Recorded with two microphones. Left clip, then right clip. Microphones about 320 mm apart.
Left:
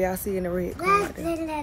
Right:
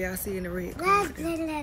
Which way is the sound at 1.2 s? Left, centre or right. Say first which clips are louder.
Left 2 dB; centre.